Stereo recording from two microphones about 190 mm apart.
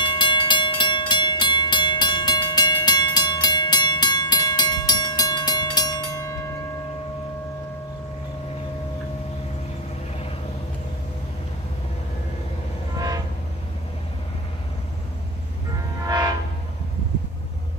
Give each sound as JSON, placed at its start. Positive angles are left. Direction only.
{"t": 0.0, "sound": "train", "side_deg": 25}